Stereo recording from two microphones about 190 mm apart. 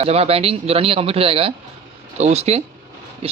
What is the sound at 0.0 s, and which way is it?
Speech, 30° right (ahead or behind).